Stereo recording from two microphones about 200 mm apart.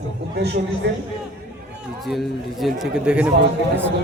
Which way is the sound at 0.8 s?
60° right (ahead or behind).